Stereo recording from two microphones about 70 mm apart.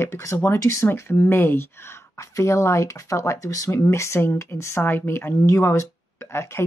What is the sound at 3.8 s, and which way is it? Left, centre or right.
Speech, left.